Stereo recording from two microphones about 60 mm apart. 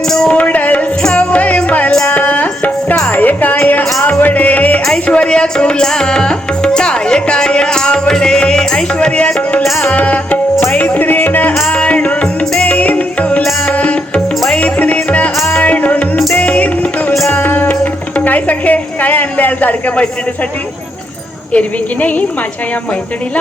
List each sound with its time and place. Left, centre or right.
0.1 s a sound: centre
0.3 s a sound: left
1.0 s music: centre
9.8 s tabla: left
10.6 s music: left
17.2 s music: left
21.5 s a woman's voice: left